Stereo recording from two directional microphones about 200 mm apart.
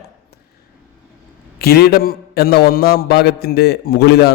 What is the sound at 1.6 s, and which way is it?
A man's voice, 50° left (ahead or behind).